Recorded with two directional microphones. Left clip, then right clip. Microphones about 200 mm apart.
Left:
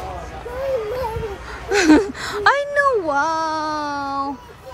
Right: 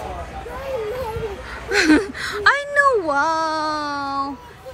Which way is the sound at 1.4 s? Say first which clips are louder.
Left 2 dB; 20° left (ahead or behind).